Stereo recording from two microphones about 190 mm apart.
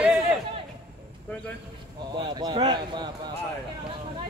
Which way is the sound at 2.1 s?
25° right (ahead or behind).